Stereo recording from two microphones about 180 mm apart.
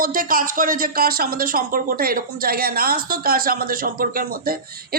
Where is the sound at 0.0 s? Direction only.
50° right (ahead or behind).